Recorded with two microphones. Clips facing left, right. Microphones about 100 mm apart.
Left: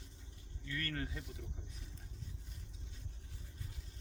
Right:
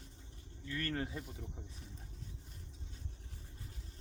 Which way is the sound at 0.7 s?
30° right (ahead or behind).